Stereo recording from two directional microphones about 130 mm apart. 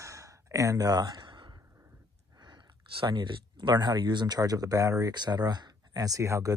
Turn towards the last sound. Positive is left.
turn(degrees=-25)  # may be behind; listen again after turning